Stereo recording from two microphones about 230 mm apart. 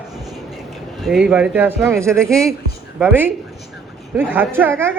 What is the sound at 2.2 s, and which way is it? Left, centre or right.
A woman's voice, centre.